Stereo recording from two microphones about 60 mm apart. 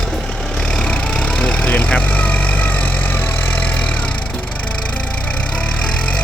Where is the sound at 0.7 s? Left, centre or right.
Centre.